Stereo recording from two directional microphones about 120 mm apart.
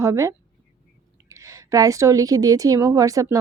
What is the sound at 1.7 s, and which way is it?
A woman's voice, 30° right (ahead or behind).